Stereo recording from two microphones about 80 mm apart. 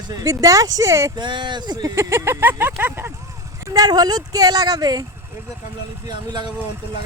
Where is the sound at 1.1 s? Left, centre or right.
Right.